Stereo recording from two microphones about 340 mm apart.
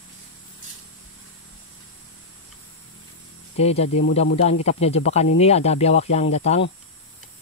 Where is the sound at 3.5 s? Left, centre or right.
Centre.